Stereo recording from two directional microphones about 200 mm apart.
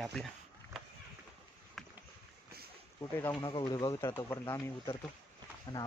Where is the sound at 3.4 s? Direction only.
20° left (ahead or behind).